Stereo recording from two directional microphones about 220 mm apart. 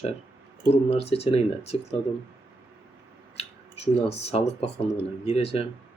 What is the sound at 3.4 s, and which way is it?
Speech, 30° left (ahead or behind).